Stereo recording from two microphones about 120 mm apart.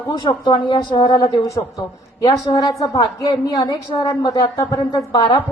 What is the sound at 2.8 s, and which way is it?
A woman's voice, 30° left (ahead or behind).